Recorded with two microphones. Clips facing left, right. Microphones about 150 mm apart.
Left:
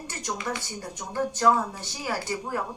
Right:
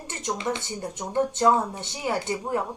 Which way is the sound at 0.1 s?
20° right (ahead or behind).